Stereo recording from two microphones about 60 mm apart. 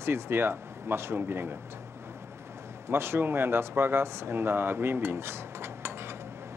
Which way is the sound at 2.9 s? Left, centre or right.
Right.